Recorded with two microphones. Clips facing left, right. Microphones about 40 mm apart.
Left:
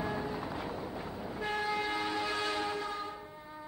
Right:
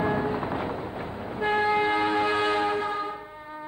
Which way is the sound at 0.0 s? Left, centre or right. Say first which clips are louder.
Right 10 dB; right.